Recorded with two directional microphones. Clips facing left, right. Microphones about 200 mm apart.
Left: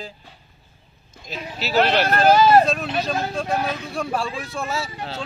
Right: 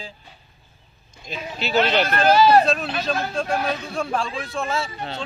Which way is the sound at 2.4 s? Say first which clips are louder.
Right 1 dB; 45° left (ahead or behind).